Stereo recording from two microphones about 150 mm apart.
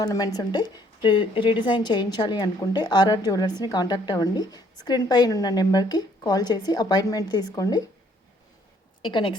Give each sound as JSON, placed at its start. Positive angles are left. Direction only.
{"t": 0.0, "sound": "a woman's voice", "side_deg": 25}
{"t": 9.0, "sound": "a woman's voice", "side_deg": 30}